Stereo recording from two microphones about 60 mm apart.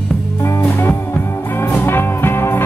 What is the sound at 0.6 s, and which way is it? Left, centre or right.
Music, left.